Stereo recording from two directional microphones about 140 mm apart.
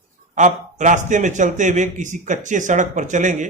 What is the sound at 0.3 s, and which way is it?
A man's voice, 60° right (ahead or behind).